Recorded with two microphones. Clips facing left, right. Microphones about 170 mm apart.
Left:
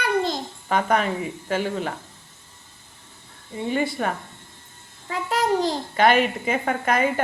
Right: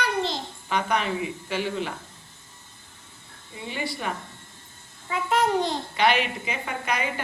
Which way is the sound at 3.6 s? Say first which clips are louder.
Left 7 dB; 50° left (ahead or behind).